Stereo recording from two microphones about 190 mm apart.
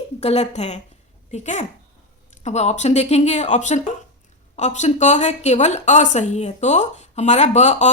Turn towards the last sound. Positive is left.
turn(degrees=35)  # may be behind; listen again after turning